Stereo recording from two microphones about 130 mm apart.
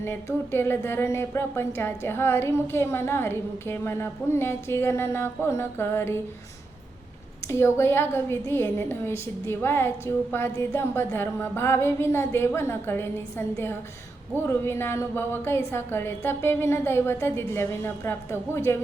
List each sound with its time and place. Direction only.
0.0 s a woman's voice: 20° left (ahead or behind)
7.4 s a woman's voice: 20° left (ahead or behind)